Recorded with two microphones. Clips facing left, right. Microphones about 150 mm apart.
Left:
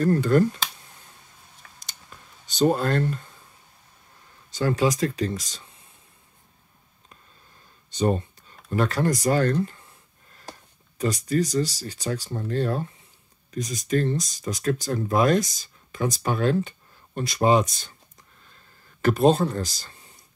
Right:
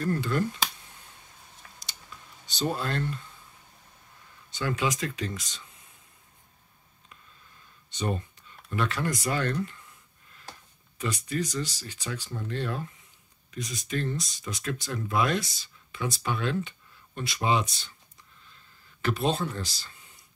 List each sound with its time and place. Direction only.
0.0 s speech: 45° left (ahead or behind)
1.8 s a sound: 50° left (ahead or behind)
4.5 s speech: 40° left (ahead or behind)
7.9 s speech: 35° left (ahead or behind)
11.0 s speech: 40° left (ahead or behind)
18.4 s a sound: 45° left (ahead or behind)